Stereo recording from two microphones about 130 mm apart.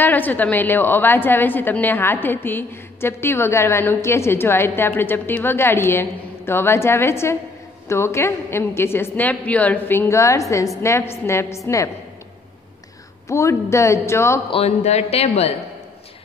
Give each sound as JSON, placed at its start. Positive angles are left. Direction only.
{"t": 0.0, "sound": "a woman's voice", "side_deg": 15}
{"t": 13.3, "sound": "a woman's voice", "side_deg": 20}
{"t": 14.5, "sound": "speech", "side_deg": 55}